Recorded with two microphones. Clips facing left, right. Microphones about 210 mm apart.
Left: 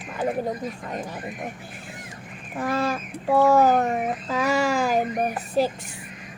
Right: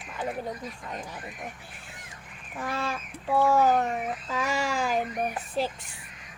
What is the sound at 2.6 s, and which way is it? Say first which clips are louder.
Speech: left 7 dB; 40° left (ahead or behind).